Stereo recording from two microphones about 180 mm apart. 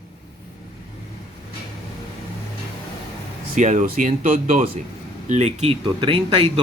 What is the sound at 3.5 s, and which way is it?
Speech, 45° right (ahead or behind).